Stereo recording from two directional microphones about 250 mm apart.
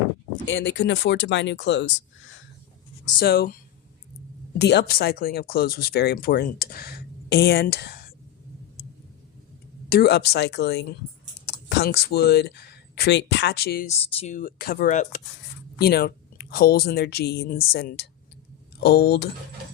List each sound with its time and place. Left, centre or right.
0.4 s speech: left
3.2 s speech: left
9.9 s speech: left
14.0 s speech: left